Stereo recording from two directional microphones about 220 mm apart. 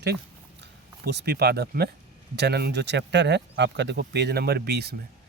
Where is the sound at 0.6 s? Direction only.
50° right (ahead or behind).